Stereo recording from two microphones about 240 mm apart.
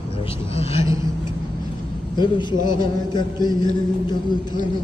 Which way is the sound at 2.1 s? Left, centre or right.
Centre.